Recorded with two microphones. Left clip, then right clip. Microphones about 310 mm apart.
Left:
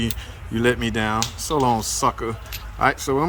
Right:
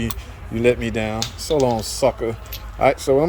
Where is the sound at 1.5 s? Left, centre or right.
Left.